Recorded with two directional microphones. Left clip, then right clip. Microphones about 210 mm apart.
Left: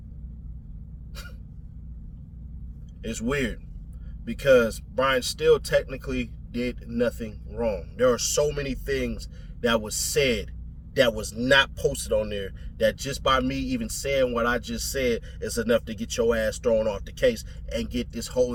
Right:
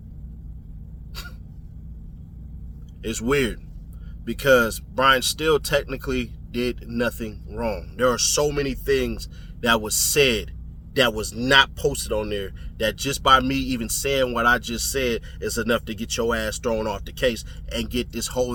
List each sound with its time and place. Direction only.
3.0 s a man's voice: 20° right (ahead or behind)